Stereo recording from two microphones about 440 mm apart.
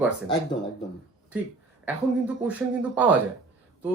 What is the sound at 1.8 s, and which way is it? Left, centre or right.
Speech, centre.